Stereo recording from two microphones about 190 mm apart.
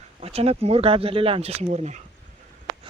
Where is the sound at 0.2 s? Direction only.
30° right (ahead or behind).